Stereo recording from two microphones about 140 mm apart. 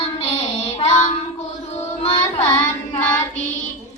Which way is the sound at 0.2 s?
45° left (ahead or behind).